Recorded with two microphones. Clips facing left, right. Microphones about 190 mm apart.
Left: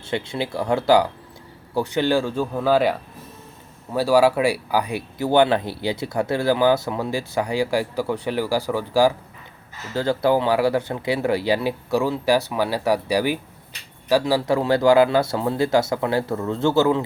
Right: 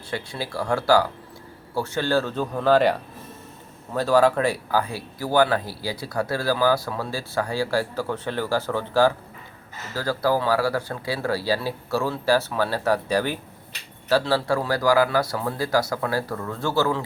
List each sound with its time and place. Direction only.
0.1 s speech: 20° left (ahead or behind)
9.9 s speech: 25° left (ahead or behind)